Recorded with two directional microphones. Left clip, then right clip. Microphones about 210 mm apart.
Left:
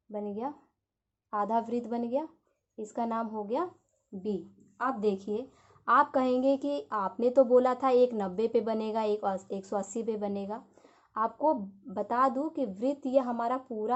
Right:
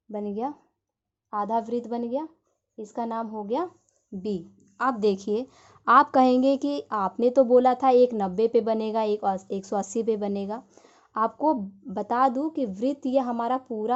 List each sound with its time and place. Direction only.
0.1 s a woman's voice: 35° right (ahead or behind)
1.3 s a woman's voice: 25° right (ahead or behind)
4.2 s a woman's voice: 45° right (ahead or behind)